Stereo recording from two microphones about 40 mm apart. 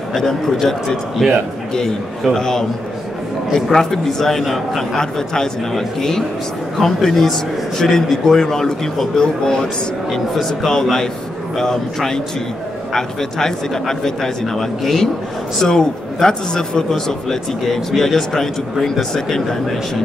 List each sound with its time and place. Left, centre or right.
0.1 s a man's voice: centre
3.7 s a man's voice: centre
10.3 s a man's voice: centre
15.6 s a man's voice: centre
16.9 s a man's voice: centre